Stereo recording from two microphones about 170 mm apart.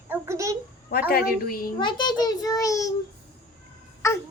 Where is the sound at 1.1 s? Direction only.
60° left (ahead or behind).